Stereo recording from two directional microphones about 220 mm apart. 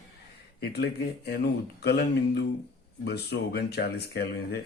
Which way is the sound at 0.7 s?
45° left (ahead or behind).